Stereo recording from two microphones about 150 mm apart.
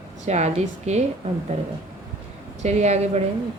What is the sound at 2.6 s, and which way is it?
Speech, 50° right (ahead or behind).